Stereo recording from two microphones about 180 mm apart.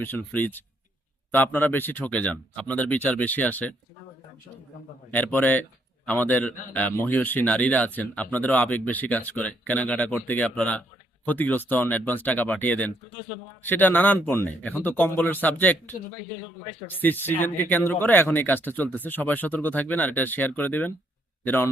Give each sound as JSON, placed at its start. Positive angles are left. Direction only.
{"t": 0.0, "sound": "a man's voice", "side_deg": 10}
{"t": 5.1, "sound": "a man's voice", "side_deg": 10}